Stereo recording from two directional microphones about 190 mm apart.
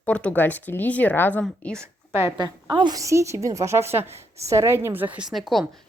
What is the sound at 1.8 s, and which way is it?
A woman's voice, 15° right (ahead or behind).